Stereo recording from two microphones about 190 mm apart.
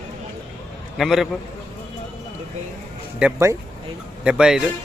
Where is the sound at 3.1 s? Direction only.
10° right (ahead or behind).